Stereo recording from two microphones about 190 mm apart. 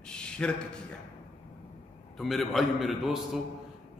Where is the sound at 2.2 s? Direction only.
Centre (ahead or behind).